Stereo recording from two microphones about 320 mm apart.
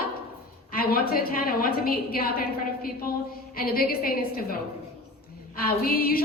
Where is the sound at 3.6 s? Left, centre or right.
Left.